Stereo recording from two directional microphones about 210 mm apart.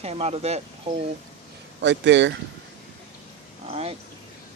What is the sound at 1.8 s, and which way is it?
Speech, 55° right (ahead or behind).